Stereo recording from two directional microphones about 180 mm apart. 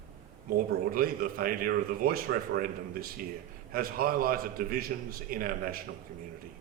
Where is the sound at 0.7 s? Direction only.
55° right (ahead or behind).